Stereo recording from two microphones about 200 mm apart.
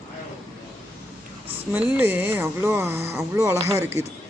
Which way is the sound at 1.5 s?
10° right (ahead or behind).